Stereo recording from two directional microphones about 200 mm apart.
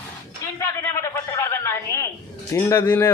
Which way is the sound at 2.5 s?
15° left (ahead or behind).